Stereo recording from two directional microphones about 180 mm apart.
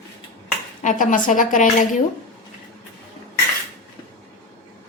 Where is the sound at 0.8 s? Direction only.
45° left (ahead or behind).